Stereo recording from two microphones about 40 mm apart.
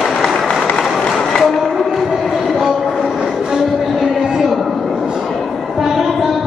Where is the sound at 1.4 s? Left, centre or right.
Centre.